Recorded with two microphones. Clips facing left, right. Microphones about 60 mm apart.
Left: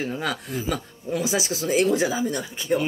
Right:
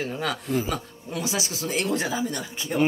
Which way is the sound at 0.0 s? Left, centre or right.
Centre.